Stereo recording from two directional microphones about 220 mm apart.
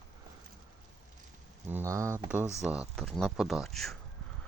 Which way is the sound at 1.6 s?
10° right (ahead or behind).